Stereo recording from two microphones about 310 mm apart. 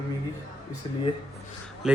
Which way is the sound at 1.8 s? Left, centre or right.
Centre.